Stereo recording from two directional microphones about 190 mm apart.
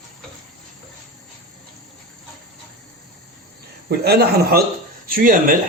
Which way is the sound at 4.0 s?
55° right (ahead or behind).